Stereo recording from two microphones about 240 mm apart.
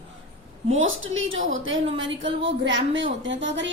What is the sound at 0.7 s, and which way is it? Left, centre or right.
A woman's voice, right.